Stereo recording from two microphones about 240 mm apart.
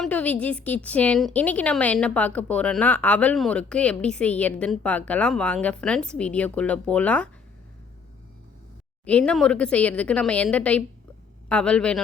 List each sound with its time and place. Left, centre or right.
0.0 s a woman's voice: centre
9.0 s a woman's voice: centre